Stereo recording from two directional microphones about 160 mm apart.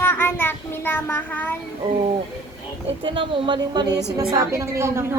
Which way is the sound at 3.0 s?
30° right (ahead or behind).